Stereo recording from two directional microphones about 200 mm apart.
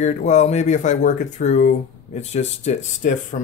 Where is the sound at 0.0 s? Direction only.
35° left (ahead or behind).